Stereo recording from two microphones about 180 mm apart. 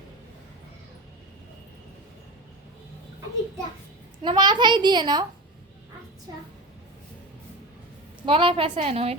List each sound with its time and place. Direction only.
4.2 s a child's voice: 25° right (ahead or behind)
8.2 s a child's voice: 30° right (ahead or behind)